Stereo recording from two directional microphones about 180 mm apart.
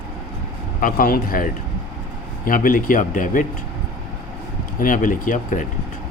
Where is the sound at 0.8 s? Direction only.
50° left (ahead or behind).